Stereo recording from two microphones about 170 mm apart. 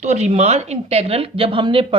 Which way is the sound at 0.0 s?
40° right (ahead or behind).